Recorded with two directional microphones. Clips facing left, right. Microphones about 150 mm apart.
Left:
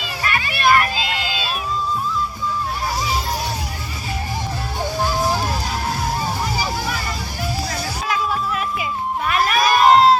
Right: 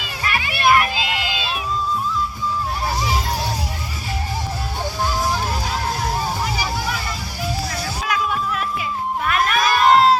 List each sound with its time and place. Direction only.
0.6 s a sound: 5° right (ahead or behind)
8.0 s music: centre (ahead or behind)
9.2 s crowd: 5° left (ahead or behind)